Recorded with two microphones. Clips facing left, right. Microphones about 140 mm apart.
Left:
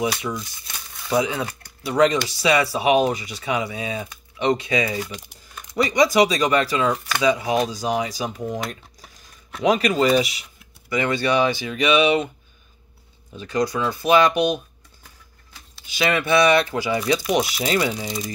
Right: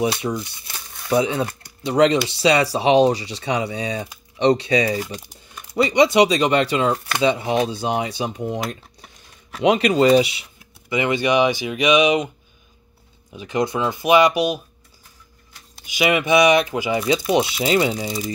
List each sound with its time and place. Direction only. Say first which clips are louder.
0.0 s speech: right 3 dB; 30° right (ahead or behind)
6.1 s speech: right 2 dB; 30° right (ahead or behind)
10.9 s speech: right 2 dB; 15° right (ahead or behind)
13.3 s speech: right 1 dB; 15° right (ahead or behind)
15.8 s speech: right 3 dB; 15° right (ahead or behind)